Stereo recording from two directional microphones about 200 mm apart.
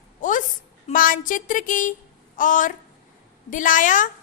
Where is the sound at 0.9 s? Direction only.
45° left (ahead or behind).